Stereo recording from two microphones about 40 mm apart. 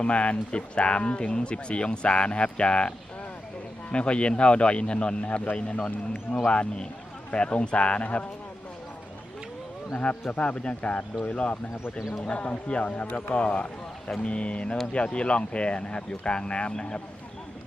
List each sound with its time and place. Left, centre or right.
0.0 s speech: left
3.9 s speech: left
6.4 s a man's voice: left
10.0 s a man's voice: left